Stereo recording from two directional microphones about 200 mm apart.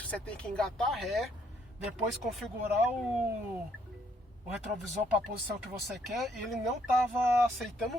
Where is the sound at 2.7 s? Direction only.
10° right (ahead or behind).